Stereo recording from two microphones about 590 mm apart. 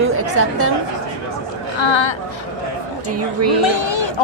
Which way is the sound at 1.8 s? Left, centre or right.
Left.